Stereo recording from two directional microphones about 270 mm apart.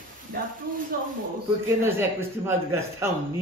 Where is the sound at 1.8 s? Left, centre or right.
Centre.